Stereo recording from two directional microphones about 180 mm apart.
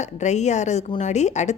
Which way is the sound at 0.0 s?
40° left (ahead or behind).